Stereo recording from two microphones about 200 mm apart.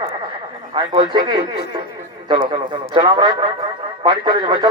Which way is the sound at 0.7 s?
25° right (ahead or behind).